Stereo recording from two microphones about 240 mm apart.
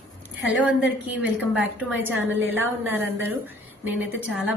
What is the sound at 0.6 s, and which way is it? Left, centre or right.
A woman's voice, centre.